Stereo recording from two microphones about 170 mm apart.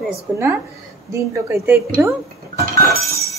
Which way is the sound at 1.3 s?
15° right (ahead or behind).